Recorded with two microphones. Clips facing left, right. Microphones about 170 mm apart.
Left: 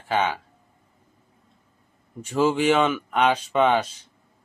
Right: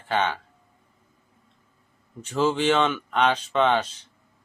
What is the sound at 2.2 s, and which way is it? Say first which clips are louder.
Speech: left 2 dB; 10° left (ahead or behind).